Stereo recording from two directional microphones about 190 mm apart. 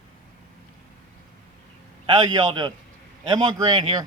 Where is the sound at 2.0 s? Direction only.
25° right (ahead or behind).